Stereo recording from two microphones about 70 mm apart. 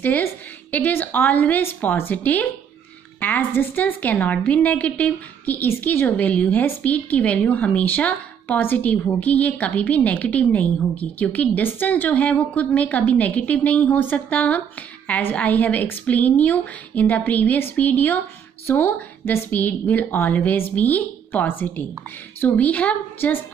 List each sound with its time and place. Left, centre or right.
0.0 s a woman's voice: left